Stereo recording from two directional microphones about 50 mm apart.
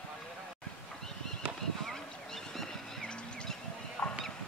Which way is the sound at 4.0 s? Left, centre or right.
Left.